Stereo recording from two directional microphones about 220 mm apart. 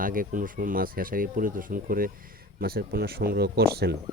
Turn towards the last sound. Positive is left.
turn(degrees=-45)  # may be behind; listen again after turning